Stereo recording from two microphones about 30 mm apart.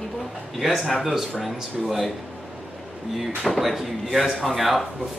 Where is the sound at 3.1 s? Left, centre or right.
Centre.